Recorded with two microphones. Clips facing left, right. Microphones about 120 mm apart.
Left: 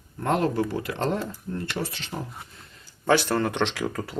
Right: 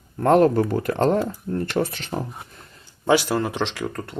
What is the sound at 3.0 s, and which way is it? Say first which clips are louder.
Speech: right 2 dB; 10° right (ahead or behind).